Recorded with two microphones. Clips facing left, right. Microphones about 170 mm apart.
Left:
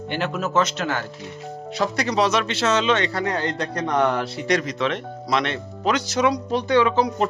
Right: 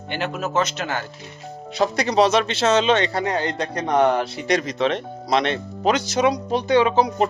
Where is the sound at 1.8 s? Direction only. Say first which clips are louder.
Right 3 dB; 25° right (ahead or behind).